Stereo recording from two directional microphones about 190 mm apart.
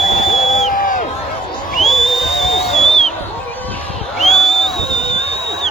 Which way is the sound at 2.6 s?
Centre (ahead or behind).